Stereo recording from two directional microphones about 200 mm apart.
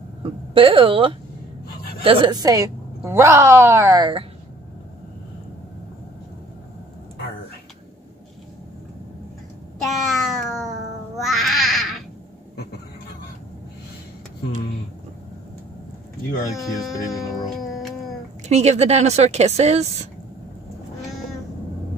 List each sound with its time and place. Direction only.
0.2 s a woman's voice: 25° right (ahead or behind)
9.8 s meow: centre (ahead or behind)
11.1 s babbling: centre (ahead or behind)
16.5 s speech: centre (ahead or behind)
17.6 s cat: centre (ahead or behind)
18.5 s speech: 35° right (ahead or behind)